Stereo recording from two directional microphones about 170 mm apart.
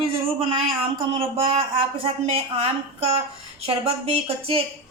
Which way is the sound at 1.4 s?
30° right (ahead or behind).